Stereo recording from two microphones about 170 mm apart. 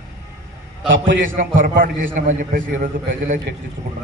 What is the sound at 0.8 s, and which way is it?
Speech, 90° right.